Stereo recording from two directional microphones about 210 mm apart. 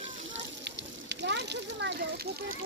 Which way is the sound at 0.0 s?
65° right (ahead or behind).